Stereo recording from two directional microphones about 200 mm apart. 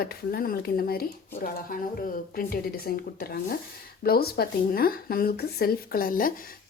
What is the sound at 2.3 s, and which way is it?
Speech, 45° left (ahead or behind).